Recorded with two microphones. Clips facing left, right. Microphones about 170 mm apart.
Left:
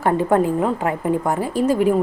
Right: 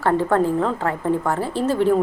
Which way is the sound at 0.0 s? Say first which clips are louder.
Left 1 dB; 15° left (ahead or behind).